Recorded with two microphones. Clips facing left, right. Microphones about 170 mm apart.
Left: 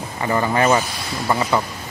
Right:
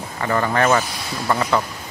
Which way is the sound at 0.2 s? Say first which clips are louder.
Left 1 dB; 15° left (ahead or behind).